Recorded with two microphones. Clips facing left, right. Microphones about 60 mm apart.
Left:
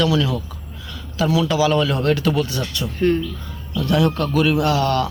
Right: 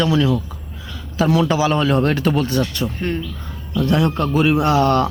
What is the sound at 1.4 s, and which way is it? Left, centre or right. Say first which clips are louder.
Speech: right 1 dB; right.